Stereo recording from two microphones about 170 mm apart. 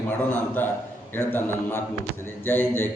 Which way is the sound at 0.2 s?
10° left (ahead or behind).